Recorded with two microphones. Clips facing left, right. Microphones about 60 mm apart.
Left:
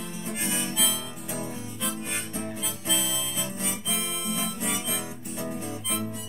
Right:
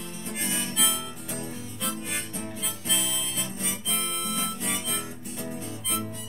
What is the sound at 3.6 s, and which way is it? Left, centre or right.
Guitar, centre.